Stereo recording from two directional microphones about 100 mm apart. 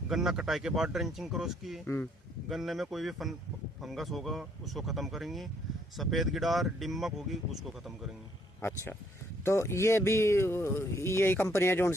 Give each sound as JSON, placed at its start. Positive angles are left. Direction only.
{"t": 0.1, "sound": "speech", "side_deg": -5}
{"t": 8.6, "sound": "speech", "side_deg": 25}